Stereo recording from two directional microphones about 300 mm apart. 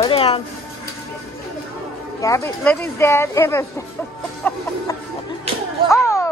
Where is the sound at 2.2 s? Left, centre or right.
Centre.